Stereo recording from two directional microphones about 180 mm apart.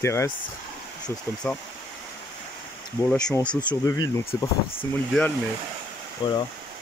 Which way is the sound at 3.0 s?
5° left (ahead or behind).